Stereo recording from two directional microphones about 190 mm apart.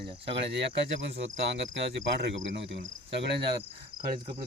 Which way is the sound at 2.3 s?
70° right (ahead or behind).